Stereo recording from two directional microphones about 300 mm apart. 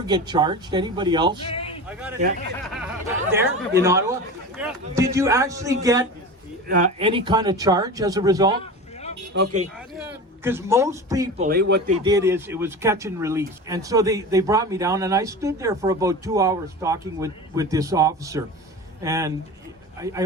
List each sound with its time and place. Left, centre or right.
0.0 s speech: centre
1.9 s a man's voice: centre
3.3 s speech: centre
6.7 s speech: right
9.3 s speech: right
10.1 s a man's voice: centre
11.4 s speech: right
11.9 s speech: centre